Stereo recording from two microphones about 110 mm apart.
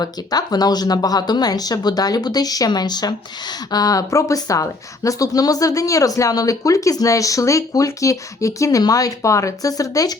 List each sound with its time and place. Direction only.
0.0 s speech: 35° left (ahead or behind)